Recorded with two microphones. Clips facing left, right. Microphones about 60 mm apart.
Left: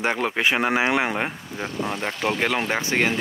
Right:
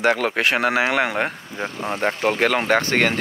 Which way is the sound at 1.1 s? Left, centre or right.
Right.